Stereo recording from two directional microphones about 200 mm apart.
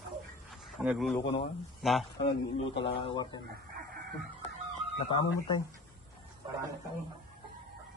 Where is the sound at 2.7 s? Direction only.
25° left (ahead or behind).